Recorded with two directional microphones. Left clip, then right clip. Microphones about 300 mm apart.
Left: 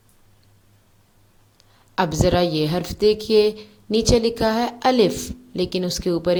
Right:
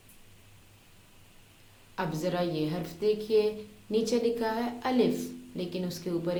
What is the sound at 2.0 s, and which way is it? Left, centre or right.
A woman's voice, left.